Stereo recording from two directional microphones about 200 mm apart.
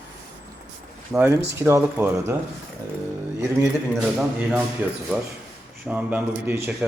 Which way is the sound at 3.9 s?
5° right (ahead or behind).